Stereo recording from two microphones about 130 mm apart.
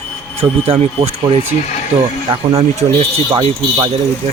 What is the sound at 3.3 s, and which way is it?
Speech, 40° right (ahead or behind).